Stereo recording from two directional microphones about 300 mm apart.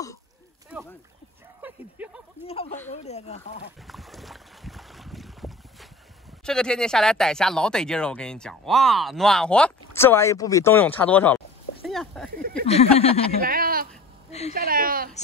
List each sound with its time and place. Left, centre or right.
1.6 s a sound: centre
2.4 s speech: centre
3.8 s boat: centre
6.4 s speech: centre
12.3 s a sound: right
12.6 s speech: left
13.4 s a woman's voice: right